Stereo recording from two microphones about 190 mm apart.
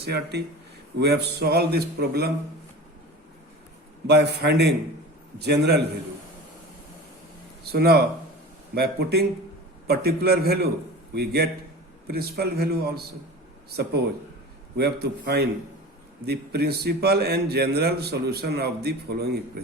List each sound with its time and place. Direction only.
0.0 s a man's voice: 60° right (ahead or behind)
4.0 s a man's voice: 60° right (ahead or behind)
7.6 s a man's voice: 55° right (ahead or behind)